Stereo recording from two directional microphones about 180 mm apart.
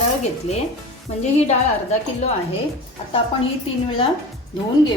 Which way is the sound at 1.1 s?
35° left (ahead or behind).